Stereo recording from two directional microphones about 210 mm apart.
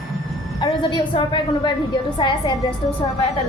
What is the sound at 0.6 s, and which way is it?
A woman's voice, 20° left (ahead or behind).